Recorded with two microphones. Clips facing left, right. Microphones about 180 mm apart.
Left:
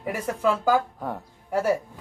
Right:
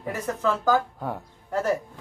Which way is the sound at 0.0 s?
10° left (ahead or behind).